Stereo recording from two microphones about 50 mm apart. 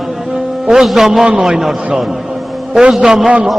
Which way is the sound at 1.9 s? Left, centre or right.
Centre.